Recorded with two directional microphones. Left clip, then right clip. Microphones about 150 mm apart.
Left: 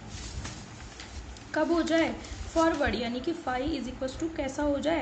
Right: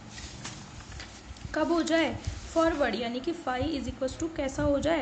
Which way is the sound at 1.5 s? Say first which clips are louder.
Even; 20° right (ahead or behind).